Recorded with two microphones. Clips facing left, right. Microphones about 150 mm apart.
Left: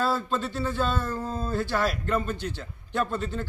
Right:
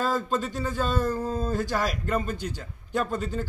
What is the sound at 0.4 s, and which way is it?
Speech, 15° right (ahead or behind).